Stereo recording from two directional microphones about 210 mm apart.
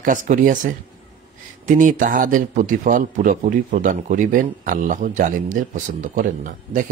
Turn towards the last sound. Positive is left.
turn(degrees=-40)  # may be behind; listen again after turning